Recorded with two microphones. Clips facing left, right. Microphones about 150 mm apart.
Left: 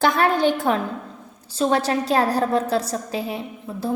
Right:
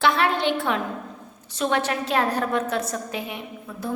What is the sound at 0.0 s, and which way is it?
A woman's voice, 40° left (ahead or behind).